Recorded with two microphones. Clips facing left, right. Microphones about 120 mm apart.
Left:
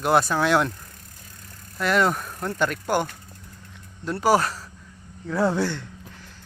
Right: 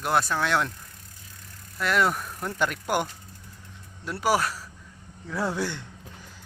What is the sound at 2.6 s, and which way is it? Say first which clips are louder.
Speech: left 3 dB; 10° right (ahead or behind).